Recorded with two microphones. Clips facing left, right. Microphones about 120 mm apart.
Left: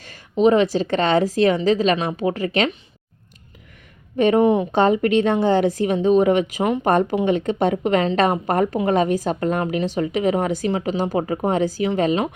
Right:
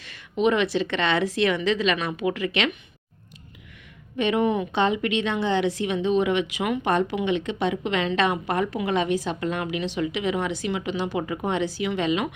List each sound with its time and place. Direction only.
0.0 s a woman's voice: 40° left (ahead or behind)
4.2 s a woman's voice: 40° left (ahead or behind)